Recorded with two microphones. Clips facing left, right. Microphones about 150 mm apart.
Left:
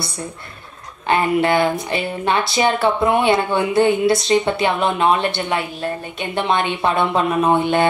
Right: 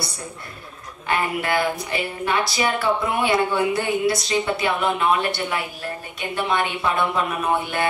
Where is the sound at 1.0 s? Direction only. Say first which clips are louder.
Left 7 dB; 25° left (ahead or behind).